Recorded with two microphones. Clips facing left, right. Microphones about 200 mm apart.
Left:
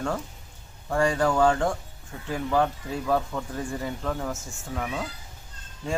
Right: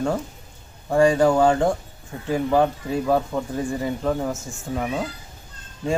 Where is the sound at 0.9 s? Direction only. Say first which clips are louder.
Right 7 dB; 15° right (ahead or behind).